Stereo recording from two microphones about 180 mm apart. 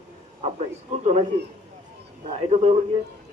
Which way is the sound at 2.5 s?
35° right (ahead or behind).